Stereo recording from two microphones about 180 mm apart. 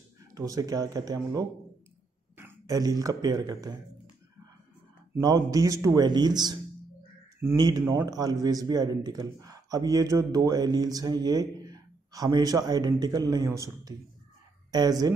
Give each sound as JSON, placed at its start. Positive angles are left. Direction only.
{"t": 0.3, "sound": "a man's voice", "side_deg": -20}
{"t": 5.1, "sound": "speech", "side_deg": -20}